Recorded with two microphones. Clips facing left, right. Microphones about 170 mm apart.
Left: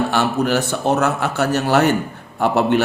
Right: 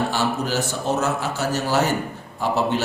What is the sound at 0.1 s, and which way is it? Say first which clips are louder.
A man's voice: left 5 dB; 65° left (ahead or behind).